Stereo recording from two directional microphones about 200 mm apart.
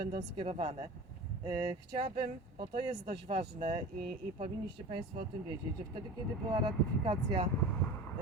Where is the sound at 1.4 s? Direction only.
20° right (ahead or behind).